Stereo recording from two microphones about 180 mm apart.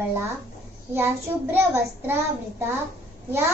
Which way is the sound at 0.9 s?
15° right (ahead or behind).